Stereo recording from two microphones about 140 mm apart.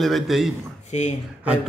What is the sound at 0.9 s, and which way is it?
Speech, 55° left (ahead or behind).